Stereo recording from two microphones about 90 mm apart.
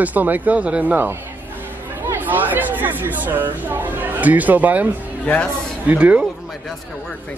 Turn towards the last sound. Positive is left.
turn(degrees=-15)  # may be behind; listen again after turning